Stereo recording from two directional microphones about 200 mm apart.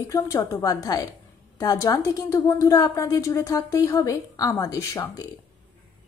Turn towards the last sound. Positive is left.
turn(degrees=15)  # may be behind; listen again after turning